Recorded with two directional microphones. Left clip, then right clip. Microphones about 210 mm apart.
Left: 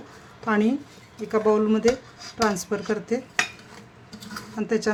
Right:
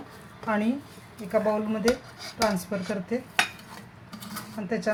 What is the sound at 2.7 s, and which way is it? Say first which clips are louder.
Speech: left 4 dB; 45° left (ahead or behind).